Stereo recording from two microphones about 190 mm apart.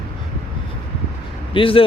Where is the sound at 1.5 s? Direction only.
30° left (ahead or behind).